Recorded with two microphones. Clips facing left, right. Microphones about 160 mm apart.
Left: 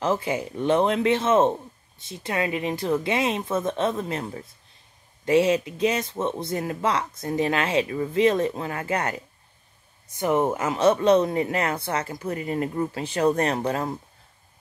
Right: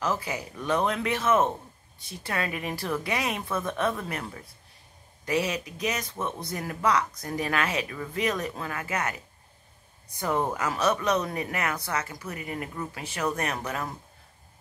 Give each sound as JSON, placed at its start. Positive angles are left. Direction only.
{"t": 0.0, "sound": "speech", "side_deg": 25}